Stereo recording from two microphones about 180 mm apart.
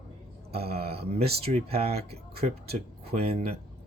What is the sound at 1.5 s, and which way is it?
Speech, 35° right (ahead or behind).